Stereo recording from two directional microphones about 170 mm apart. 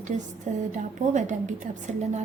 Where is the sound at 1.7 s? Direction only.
45° right (ahead or behind).